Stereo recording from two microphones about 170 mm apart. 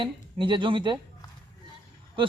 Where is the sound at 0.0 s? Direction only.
30° right (ahead or behind).